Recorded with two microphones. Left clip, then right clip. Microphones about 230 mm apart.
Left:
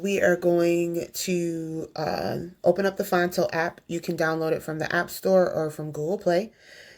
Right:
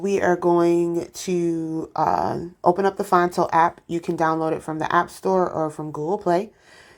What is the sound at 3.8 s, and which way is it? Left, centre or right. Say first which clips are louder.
Speech: right 4 dB; centre.